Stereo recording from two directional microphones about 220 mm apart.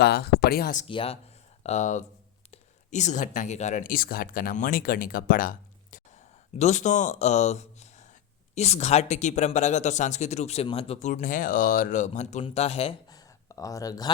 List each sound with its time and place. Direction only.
0.0 s speech: 45° left (ahead or behind)
0.9 s speech: 25° left (ahead or behind)